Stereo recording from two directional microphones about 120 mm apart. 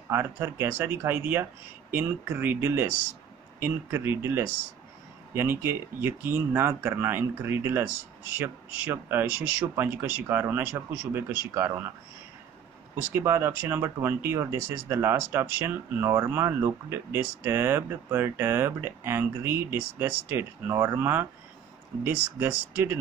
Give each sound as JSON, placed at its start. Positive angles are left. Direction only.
{"t": 0.1, "sound": "speech", "side_deg": -20}
{"t": 12.9, "sound": "speech", "side_deg": -20}